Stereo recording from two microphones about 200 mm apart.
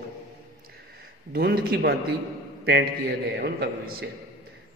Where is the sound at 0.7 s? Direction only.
50° right (ahead or behind).